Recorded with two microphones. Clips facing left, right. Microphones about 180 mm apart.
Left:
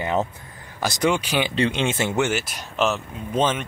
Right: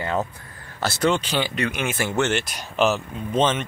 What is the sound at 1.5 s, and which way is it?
Speech, 25° left (ahead or behind).